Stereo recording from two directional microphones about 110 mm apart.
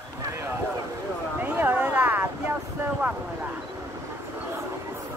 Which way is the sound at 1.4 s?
15° right (ahead or behind).